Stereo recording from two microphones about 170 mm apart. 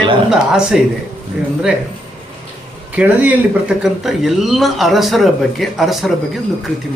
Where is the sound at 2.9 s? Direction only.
10° right (ahead or behind).